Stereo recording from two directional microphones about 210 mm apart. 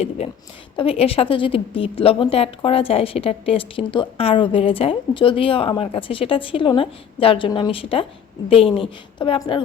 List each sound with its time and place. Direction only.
0.8 s a woman's voice: 25° left (ahead or behind)